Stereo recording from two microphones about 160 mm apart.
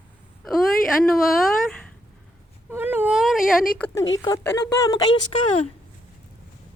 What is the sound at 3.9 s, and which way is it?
Speech, 20° left (ahead or behind).